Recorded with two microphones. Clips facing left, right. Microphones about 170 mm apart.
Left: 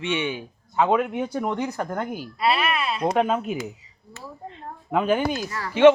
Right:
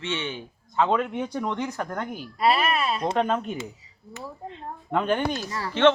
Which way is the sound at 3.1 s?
5° left (ahead or behind).